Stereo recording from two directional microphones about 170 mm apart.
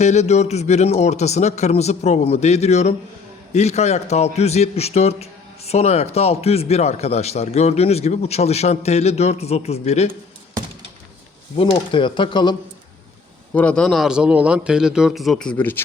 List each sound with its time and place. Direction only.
0.0 s a man's voice: 40° left (ahead or behind)
11.5 s speech: 30° left (ahead or behind)
13.5 s a man's voice: 10° left (ahead or behind)